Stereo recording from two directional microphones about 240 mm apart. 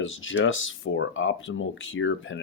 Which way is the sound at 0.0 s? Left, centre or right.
Left.